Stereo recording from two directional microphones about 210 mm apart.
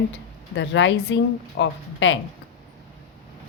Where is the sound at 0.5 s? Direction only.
60° left (ahead or behind).